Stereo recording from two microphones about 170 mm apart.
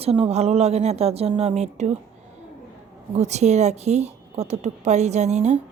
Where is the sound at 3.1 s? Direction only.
40° right (ahead or behind).